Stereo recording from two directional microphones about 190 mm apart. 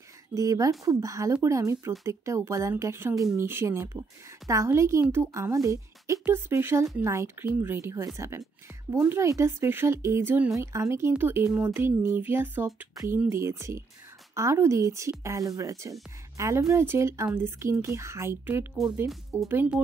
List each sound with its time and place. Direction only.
0.3 s speech: 20° right (ahead or behind)